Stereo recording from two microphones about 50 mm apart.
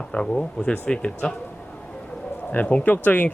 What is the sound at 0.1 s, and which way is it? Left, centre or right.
Speech, centre.